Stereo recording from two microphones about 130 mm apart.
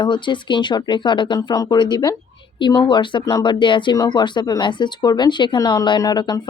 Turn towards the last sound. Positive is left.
turn(degrees=30)  # may be behind; listen again after turning